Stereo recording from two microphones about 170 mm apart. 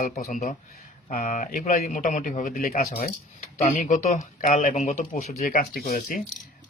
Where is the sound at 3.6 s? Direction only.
45° left (ahead or behind).